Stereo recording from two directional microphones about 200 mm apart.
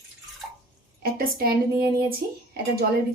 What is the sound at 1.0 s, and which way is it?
Speech, 45° right (ahead or behind).